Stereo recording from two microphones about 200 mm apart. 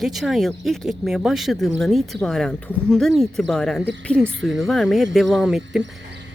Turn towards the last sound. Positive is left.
turn(degrees=0)  # may be behind; listen again after turning